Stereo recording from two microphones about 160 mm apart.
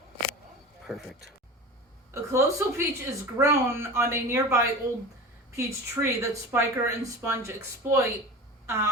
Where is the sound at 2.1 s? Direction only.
20° right (ahead or behind).